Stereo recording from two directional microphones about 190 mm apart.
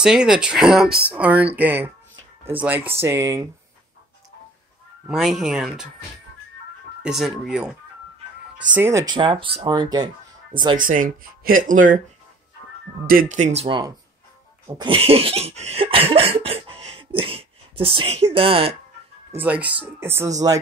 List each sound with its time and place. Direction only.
0.0 s speech: 5° right (ahead or behind)
5.0 s speech: 5° right (ahead or behind)
7.0 s speech: centre (ahead or behind)
8.7 s speech: 15° right (ahead or behind)
10.8 s speech: 45° right (ahead or behind)
13.0 s speech: 50° right (ahead or behind); by 13.9 s 25° right (ahead or behind)
14.8 s laughter: 30° right (ahead or behind)
19.3 s speech: 10° right (ahead or behind)